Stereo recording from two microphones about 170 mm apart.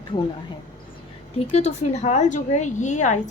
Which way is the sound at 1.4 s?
40° left (ahead or behind).